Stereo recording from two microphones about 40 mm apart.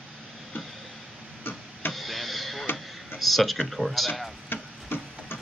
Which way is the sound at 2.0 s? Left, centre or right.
Centre.